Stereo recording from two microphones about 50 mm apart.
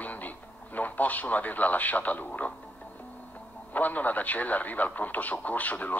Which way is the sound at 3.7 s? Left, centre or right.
Left.